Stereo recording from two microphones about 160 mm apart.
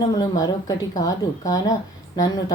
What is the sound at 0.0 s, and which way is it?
A woman's voice, 25° left (ahead or behind).